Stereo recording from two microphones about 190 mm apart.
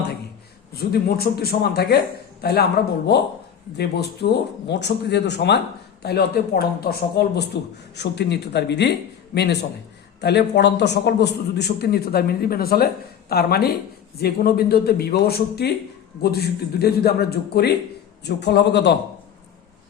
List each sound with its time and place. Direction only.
1.0 s a man's voice: 55° left (ahead or behind)